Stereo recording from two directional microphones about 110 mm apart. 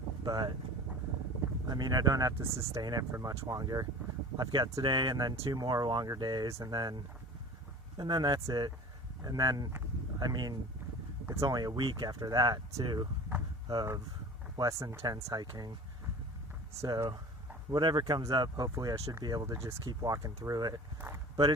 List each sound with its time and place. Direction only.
0.3 s speech: 35° right (ahead or behind)
1.6 s speech: 35° right (ahead or behind)
14.5 s speech: 35° right (ahead or behind)
16.8 s speech: 35° right (ahead or behind)